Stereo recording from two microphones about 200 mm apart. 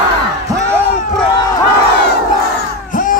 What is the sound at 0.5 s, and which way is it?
Crowd, 15° right (ahead or behind).